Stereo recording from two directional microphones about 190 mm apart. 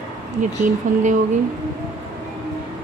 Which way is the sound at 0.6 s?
45° right (ahead or behind).